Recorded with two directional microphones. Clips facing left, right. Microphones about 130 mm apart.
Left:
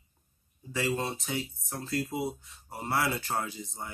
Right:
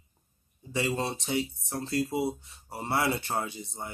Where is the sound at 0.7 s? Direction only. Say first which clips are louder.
Right 1 dB; 25° right (ahead or behind).